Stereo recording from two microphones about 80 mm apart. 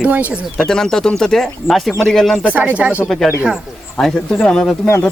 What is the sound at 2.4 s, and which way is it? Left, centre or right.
Speech, centre.